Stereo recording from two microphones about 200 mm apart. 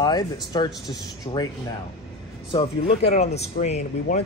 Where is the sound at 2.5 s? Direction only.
30° left (ahead or behind).